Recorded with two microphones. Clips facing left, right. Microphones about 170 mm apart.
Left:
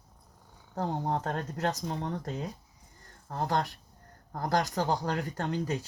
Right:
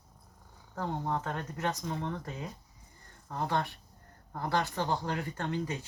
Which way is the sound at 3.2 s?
40° left (ahead or behind).